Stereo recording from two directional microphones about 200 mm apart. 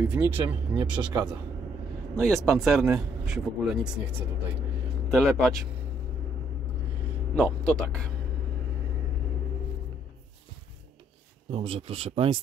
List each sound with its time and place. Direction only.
0.0 s speech: 10° right (ahead or behind)
1.0 s speech: 20° right (ahead or behind)
2.1 s speech: centre (ahead or behind)
5.1 s speech: centre (ahead or behind)
7.3 s speech: centre (ahead or behind)
11.5 s speech: 25° right (ahead or behind)